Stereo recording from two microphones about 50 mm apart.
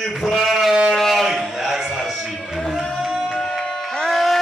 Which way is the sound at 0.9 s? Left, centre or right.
Centre.